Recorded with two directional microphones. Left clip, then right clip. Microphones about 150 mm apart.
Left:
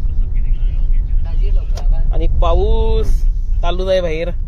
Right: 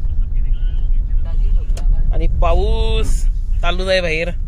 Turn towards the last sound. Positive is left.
turn(degrees=5)  # may be behind; listen again after turning